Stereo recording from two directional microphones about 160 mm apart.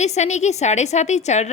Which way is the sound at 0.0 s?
45° left (ahead or behind).